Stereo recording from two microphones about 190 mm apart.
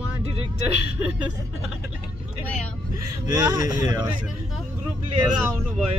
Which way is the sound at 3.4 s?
20° right (ahead or behind).